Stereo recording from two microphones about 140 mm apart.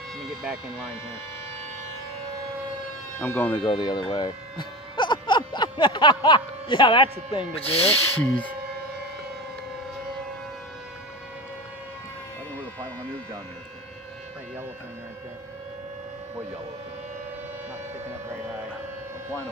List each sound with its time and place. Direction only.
0.2 s a sound: centre (ahead or behind)
3.2 s speech: 15° left (ahead or behind)
3.5 s speech: 30° left (ahead or behind)
8.2 s speech: 10° left (ahead or behind)